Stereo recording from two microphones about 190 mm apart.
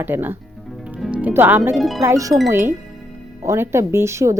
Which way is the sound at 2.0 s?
15° right (ahead or behind).